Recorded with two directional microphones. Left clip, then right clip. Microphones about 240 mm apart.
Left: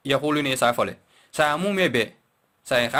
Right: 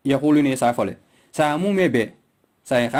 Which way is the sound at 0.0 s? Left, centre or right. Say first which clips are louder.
Right 4 dB; left.